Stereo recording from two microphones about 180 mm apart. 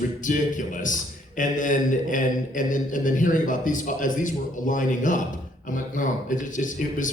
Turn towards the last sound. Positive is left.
turn(degrees=45)  # may be behind; listen again after turning